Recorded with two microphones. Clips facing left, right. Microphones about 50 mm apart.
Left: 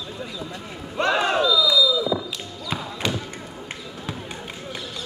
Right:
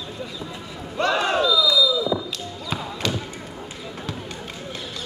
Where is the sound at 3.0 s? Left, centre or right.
Centre.